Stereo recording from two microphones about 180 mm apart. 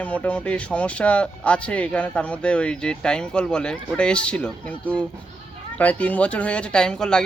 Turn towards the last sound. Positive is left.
turn(degrees=5)  # may be behind; listen again after turning